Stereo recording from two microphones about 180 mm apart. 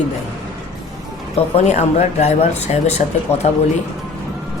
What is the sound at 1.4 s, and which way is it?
Speech, 35° left (ahead or behind).